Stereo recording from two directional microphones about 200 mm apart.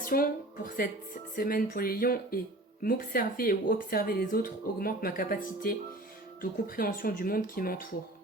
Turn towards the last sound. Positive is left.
turn(degrees=45)  # may be behind; listen again after turning